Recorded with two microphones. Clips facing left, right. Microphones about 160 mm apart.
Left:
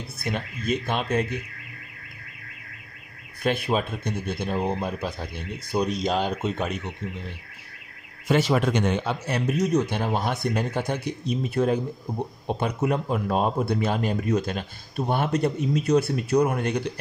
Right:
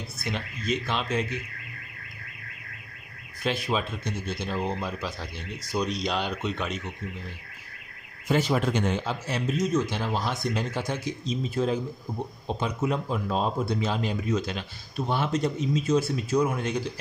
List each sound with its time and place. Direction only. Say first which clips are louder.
0.2 s speech: left 4 dB; 55° left (ahead or behind)
3.4 s speech: left 3 dB; 55° left (ahead or behind)
8.3 s speech: left 3 dB; 80° left; by 16.8 s 65° left (ahead or behind)